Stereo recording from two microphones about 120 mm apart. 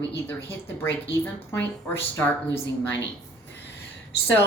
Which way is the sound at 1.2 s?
15° left (ahead or behind).